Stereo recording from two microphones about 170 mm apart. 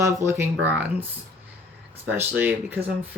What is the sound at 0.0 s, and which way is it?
Speech, 15° right (ahead or behind).